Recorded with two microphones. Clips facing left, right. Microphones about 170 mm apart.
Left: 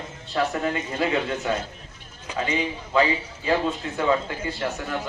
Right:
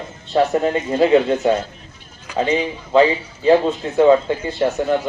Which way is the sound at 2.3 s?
30° left (ahead or behind).